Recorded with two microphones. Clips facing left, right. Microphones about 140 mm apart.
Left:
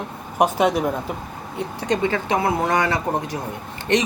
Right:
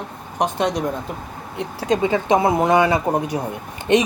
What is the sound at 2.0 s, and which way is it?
A man's voice, 15° right (ahead or behind).